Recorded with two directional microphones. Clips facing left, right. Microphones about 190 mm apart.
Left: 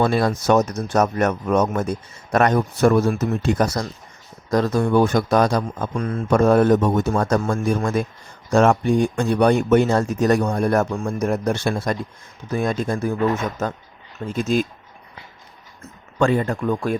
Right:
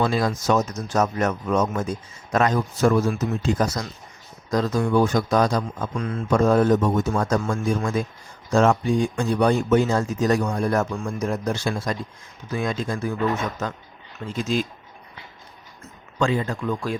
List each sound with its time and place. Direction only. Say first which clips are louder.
0.0 s speech: left 3 dB; 60° left (ahead or behind)
6.0 s speech: left 3 dB; 45° left (ahead or behind)
14.3 s speech: left 4 dB; 50° left (ahead or behind)
16.1 s speech: left 4 dB; 55° left (ahead or behind)